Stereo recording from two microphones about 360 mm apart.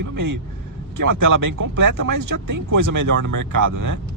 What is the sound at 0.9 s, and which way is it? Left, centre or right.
Speech, right.